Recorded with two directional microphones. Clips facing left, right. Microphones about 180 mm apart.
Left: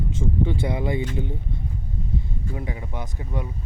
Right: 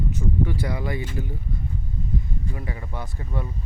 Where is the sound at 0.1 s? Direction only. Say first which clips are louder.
Left 3 dB; 25° left (ahead or behind).